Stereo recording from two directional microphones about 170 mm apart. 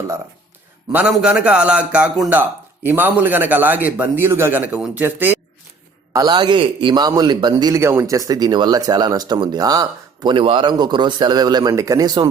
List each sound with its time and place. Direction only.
0.9 s a man's voice: 5° right (ahead or behind)
6.1 s speech: 25° right (ahead or behind)